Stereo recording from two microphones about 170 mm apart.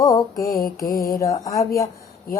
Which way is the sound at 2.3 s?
60° left (ahead or behind).